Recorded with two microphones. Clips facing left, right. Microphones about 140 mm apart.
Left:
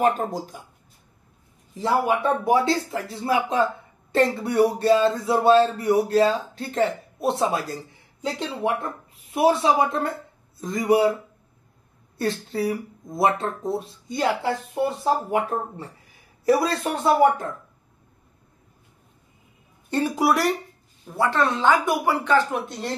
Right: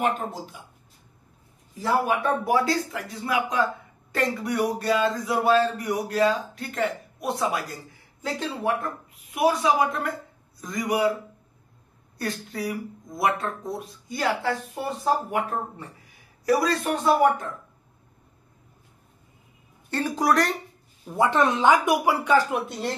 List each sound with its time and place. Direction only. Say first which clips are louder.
0.0 s speech: left 4 dB; 40° left (ahead or behind)
1.8 s speech: left 2 dB; 25° left (ahead or behind)
12.2 s speech: left 5 dB; 30° left (ahead or behind)
16.4 s speech: left 2 dB; 30° left (ahead or behind)
19.9 s speech: left 2 dB; 10° left (ahead or behind)
21.1 s speech: right 1 dB; 15° right (ahead or behind)